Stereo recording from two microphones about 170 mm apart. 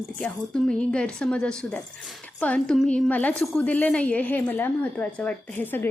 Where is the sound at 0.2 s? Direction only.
5° left (ahead or behind).